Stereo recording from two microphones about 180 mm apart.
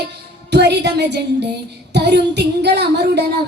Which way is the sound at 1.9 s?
70° right (ahead or behind).